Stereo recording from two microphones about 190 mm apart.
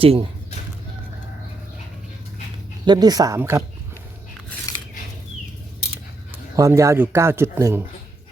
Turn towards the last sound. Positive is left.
turn(degrees=-15)  # may be behind; listen again after turning